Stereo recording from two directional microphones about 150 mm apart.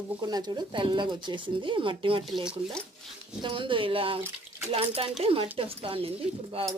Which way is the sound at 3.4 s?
35° right (ahead or behind).